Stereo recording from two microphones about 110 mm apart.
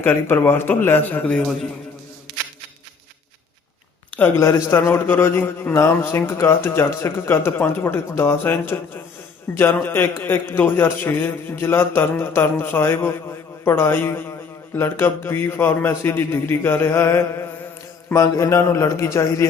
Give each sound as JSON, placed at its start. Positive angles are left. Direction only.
{"t": 0.0, "sound": "a man's voice", "side_deg": 20}
{"t": 4.2, "sound": "a man's voice", "side_deg": 25}